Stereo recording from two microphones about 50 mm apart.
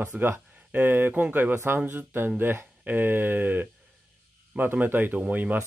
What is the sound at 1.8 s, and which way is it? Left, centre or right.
Speech, right.